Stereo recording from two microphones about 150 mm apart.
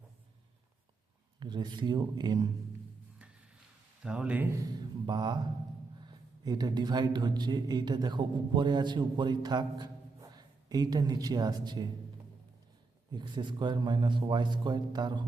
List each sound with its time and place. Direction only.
1.4 s a man's voice: 30° right (ahead or behind)
4.0 s speech: 5° right (ahead or behind)
4.6 s speech: 30° right (ahead or behind)
13.1 s a man's voice: 30° right (ahead or behind)